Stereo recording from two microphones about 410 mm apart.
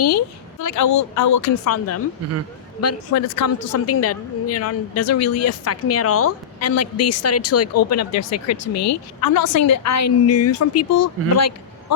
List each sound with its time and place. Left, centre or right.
0.6 s a woman's voice: left